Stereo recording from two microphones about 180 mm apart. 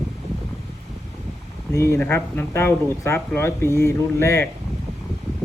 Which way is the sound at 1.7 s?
15° left (ahead or behind).